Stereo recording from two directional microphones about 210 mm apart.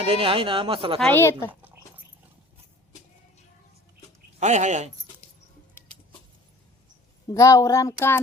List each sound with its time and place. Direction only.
0.0 s speech: 25° right (ahead or behind)
0.9 s a woman's voice: centre (ahead or behind)
1.2 s speech: 10° left (ahead or behind)
4.4 s speech: 35° right (ahead or behind)
7.3 s speech: 15° left (ahead or behind)